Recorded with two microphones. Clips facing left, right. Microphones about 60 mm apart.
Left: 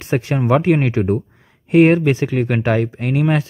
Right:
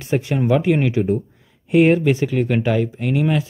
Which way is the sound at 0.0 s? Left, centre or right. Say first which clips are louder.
Left 1 dB; left.